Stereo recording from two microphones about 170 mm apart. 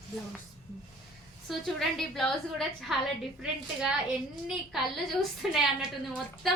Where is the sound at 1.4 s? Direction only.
Centre (ahead or behind).